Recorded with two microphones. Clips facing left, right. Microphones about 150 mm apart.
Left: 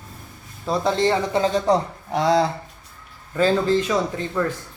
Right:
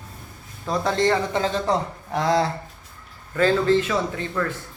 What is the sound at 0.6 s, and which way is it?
Speech, 10° left (ahead or behind).